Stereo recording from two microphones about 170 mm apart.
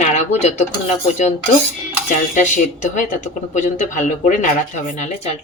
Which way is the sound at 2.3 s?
45° left (ahead or behind).